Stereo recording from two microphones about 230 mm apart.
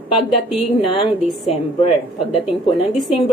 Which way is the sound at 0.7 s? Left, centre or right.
Left.